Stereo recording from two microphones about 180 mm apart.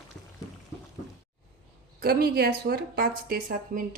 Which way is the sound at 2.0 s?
55° right (ahead or behind).